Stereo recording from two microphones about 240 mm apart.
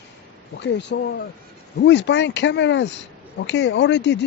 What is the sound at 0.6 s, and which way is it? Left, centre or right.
Speech, left.